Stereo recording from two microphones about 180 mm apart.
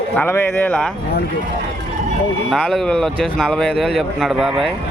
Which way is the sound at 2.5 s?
5° left (ahead or behind).